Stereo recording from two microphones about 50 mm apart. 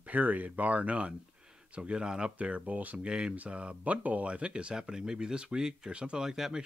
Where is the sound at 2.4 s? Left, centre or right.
Right.